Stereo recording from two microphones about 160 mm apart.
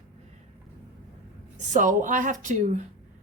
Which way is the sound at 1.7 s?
50° right (ahead or behind).